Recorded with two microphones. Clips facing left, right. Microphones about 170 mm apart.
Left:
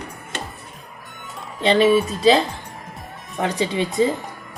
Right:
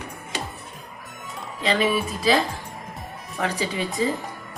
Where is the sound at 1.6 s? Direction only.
30° left (ahead or behind).